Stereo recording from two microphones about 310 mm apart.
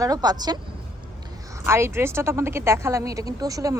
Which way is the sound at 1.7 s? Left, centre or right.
Centre.